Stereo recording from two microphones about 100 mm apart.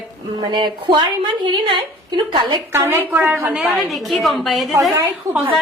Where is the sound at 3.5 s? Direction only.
5° right (ahead or behind).